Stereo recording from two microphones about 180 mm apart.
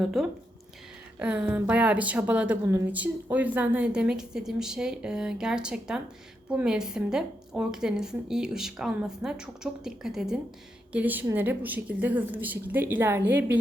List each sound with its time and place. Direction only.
0.2 s a woman's voice: centre (ahead or behind)